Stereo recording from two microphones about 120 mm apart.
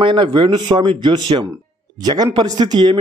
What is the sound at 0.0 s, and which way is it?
A man's voice, 40° right (ahead or behind).